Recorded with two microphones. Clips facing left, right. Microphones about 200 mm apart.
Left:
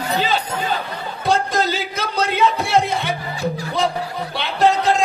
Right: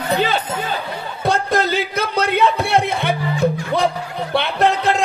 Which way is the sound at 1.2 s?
60° right (ahead or behind).